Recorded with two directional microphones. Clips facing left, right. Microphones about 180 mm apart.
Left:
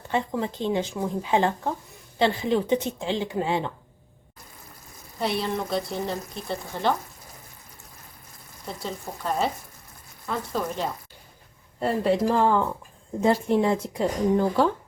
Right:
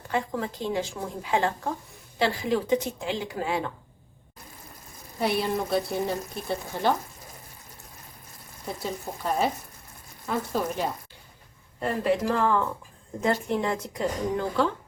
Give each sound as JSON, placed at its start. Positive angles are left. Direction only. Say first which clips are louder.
{"t": 0.1, "sound": "speech", "louder": "left 2 dB", "side_deg": 25}
{"t": 5.2, "sound": "speech", "louder": "right 1 dB", "side_deg": -5}
{"t": 8.6, "sound": "speech", "louder": "right 1 dB", "side_deg": -10}
{"t": 11.8, "sound": "speech", "louder": "left 3 dB", "side_deg": 30}